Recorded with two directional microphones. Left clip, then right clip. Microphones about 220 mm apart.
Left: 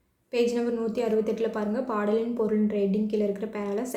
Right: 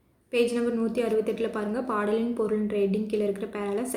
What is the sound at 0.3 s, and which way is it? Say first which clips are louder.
A woman's voice: even; 10° right (ahead or behind).